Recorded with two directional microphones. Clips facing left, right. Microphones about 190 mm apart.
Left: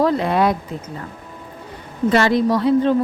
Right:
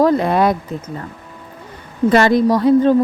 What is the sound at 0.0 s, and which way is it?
Speech, 45° right (ahead or behind).